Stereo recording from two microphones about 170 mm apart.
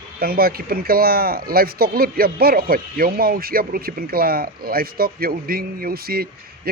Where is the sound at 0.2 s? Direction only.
60° right (ahead or behind).